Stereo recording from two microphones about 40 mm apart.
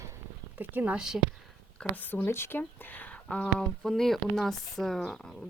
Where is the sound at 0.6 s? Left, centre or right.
Right.